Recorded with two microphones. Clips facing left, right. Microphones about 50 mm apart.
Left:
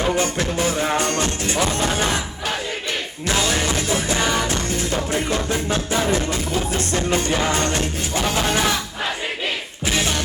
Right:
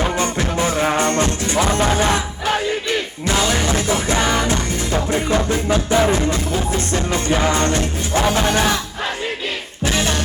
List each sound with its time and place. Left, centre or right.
0.2 s music: right
3.8 s music: right
7.3 s music: right